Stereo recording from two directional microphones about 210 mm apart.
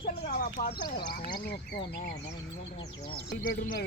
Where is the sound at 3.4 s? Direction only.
40° left (ahead or behind).